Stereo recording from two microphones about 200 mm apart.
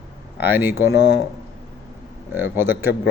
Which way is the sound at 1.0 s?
55° left (ahead or behind).